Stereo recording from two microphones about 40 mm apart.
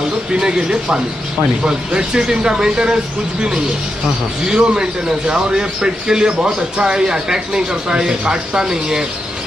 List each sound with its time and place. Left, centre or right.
0.3 s a man's voice: centre